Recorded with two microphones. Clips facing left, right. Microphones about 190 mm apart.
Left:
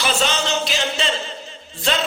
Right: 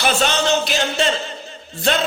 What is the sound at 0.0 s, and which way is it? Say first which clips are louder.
Music: right 3 dB; 55° right (ahead or behind).